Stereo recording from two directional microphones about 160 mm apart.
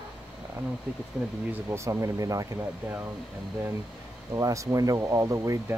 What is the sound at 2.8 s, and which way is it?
Speech, 10° right (ahead or behind).